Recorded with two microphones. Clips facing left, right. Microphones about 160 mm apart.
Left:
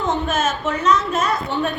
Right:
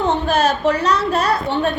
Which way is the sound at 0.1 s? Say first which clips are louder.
Right 2 dB; 35° right (ahead or behind).